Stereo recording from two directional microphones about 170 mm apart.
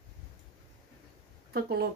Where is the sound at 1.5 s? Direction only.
65° right (ahead or behind).